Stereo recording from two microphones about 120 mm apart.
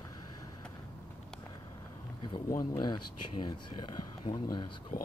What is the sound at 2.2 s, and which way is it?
Speech, 40° left (ahead or behind).